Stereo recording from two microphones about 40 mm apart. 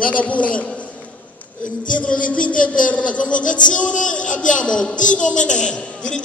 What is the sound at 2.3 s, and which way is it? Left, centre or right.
A man's voice, left.